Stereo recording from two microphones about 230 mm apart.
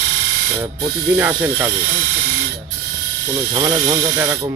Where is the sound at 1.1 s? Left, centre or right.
Centre.